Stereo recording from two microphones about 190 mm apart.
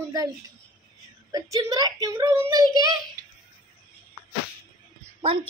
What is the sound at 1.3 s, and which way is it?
Speech, 20° right (ahead or behind).